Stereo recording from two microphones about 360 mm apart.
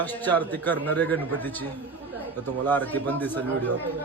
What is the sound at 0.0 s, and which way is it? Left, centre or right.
A man's voice, centre.